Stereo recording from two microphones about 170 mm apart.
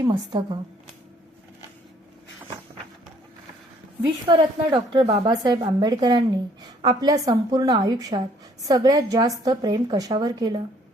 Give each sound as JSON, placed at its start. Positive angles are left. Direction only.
{"t": 0.0, "sound": "a woman's voice", "side_deg": -25}
{"t": 4.3, "sound": "a woman's voice", "side_deg": -30}